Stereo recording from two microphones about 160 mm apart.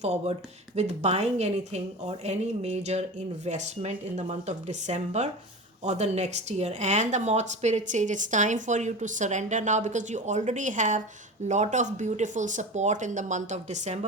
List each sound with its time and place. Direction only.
0.0 s speech: 45° right (ahead or behind)